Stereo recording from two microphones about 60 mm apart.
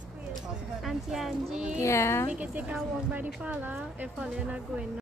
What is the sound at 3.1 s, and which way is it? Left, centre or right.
A woman's voice, right.